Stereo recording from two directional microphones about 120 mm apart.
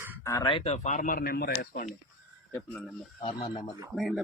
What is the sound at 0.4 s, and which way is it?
Speech, 50° left (ahead or behind).